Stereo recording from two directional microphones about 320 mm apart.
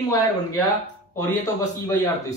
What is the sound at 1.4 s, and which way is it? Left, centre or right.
Speech, centre.